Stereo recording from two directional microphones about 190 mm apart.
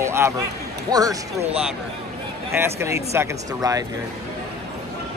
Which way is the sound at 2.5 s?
15° right (ahead or behind).